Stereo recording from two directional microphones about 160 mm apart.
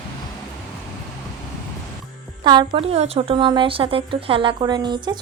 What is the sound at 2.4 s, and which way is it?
Speech, 30° right (ahead or behind).